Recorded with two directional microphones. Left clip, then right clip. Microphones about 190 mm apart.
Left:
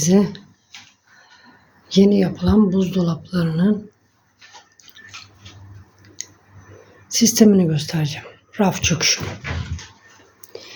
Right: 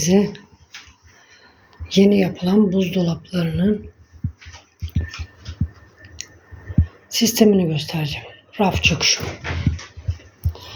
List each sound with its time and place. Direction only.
0.0 s speech: 15° left (ahead or behind)
1.9 s speech: 10° left (ahead or behind)
7.1 s a woman's voice: 20° left (ahead or behind)